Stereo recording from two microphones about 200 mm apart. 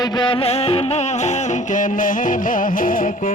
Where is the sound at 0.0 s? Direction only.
20° left (ahead or behind).